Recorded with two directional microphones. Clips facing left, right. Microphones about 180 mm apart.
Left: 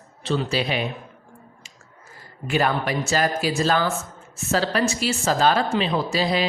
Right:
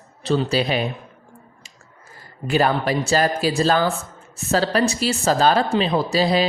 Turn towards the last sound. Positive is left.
turn(degrees=-35)  # may be behind; listen again after turning